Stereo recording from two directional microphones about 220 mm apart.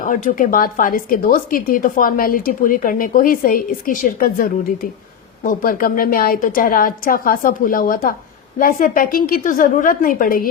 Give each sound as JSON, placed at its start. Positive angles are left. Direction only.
{"t": 0.0, "sound": "a woman's voice", "side_deg": 40}